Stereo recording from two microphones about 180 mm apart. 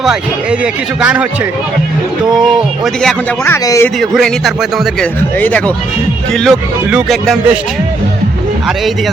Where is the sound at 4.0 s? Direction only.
Centre (ahead or behind).